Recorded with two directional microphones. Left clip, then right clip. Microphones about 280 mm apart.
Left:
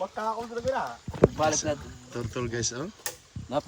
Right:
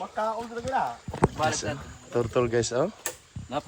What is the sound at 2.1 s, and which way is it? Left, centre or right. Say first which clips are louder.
Speech: right 9 dB; centre.